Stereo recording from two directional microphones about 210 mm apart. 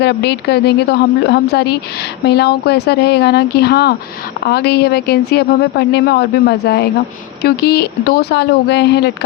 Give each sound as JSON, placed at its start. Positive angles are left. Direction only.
{"t": 0.0, "sound": "a woman's voice", "side_deg": 55}